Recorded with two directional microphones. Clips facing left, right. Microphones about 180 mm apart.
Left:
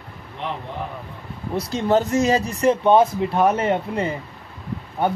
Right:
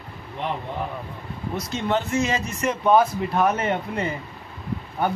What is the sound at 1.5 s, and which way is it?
A man's voice, 35° left (ahead or behind).